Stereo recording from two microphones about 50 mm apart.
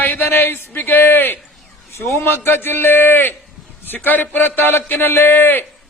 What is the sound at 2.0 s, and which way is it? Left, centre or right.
Speech, left.